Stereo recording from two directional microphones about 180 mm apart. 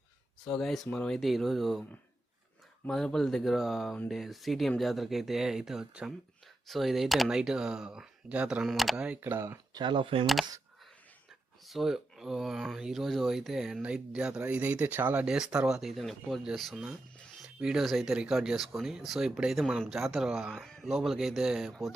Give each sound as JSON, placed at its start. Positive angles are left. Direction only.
{"t": 0.4, "sound": "speech", "side_deg": 0}
{"t": 2.8, "sound": "speech", "side_deg": 5}
{"t": 9.7, "sound": "speech", "side_deg": -25}
{"t": 11.6, "sound": "speech", "side_deg": 0}